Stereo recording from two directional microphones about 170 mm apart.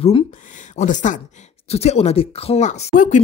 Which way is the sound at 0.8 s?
45° left (ahead or behind).